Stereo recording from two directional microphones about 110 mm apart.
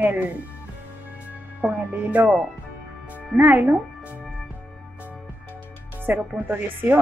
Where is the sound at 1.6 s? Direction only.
15° right (ahead or behind).